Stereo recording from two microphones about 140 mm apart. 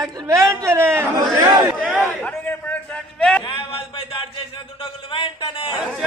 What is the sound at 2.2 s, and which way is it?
A man's voice, 10° left (ahead or behind).